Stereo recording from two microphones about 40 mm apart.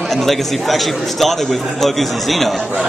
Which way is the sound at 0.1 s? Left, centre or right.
Centre.